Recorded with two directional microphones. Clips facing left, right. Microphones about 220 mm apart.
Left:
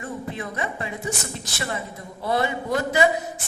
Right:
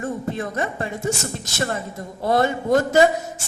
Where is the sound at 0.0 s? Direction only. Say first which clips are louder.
Right 5 dB; 45° right (ahead or behind).